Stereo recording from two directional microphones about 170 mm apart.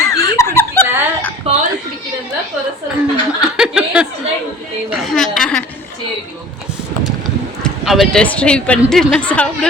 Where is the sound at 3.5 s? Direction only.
5° right (ahead or behind).